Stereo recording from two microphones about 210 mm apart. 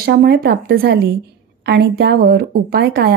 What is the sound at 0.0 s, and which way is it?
A woman's voice, 50° right (ahead or behind).